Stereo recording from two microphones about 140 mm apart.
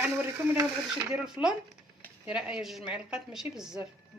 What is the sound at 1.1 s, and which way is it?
A woman's voice, 5° right (ahead or behind).